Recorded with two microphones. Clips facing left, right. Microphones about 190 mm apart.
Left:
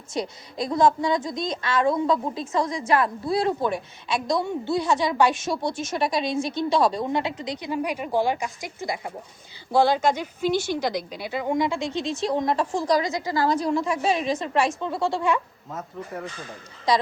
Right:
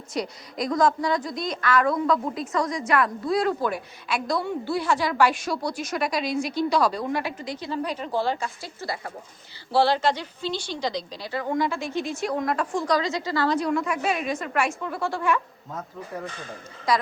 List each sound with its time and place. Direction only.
0.1 s a woman's voice: 25° left (ahead or behind)
13.0 s a woman's voice: 15° left (ahead or behind)
13.7 s a woman's voice: 30° left (ahead or behind)